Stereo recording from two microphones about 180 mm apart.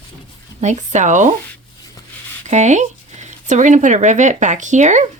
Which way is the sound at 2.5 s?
40° right (ahead or behind).